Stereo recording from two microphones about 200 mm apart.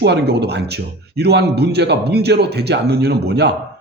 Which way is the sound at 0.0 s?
55° right (ahead or behind).